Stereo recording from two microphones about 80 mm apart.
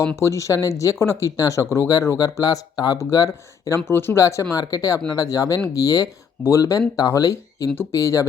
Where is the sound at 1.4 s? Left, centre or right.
Left.